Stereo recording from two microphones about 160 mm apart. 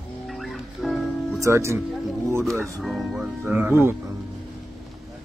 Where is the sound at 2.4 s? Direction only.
Centre (ahead or behind).